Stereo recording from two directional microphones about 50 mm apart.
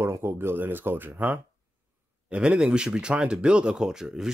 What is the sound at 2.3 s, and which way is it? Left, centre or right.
Speech, centre.